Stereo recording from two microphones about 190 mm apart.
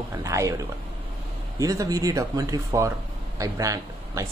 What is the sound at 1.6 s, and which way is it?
Speech, 15° right (ahead or behind).